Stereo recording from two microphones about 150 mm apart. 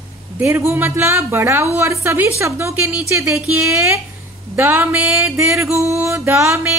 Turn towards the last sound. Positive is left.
turn(degrees=-20)  # may be behind; listen again after turning